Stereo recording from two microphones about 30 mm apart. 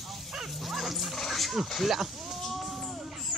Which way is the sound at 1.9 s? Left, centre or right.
Centre.